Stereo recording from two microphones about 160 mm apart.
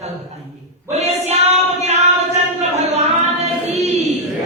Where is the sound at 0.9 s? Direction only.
45° right (ahead or behind).